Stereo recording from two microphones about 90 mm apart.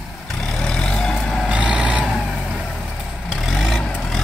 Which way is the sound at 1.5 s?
15° right (ahead or behind).